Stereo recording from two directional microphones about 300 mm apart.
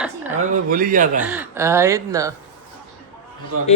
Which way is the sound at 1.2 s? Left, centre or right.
Centre.